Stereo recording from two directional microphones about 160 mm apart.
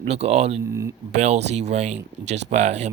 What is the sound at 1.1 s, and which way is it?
Speech, 45° right (ahead or behind).